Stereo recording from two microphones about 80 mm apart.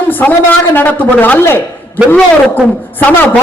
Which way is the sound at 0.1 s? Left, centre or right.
Left.